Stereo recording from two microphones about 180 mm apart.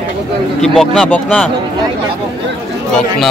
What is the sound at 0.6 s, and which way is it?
Speech, centre (ahead or behind).